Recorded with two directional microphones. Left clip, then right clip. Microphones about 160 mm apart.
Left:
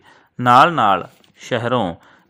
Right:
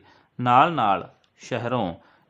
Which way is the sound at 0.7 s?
25° left (ahead or behind).